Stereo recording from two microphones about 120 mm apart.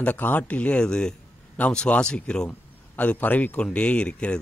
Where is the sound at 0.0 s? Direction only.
15° left (ahead or behind).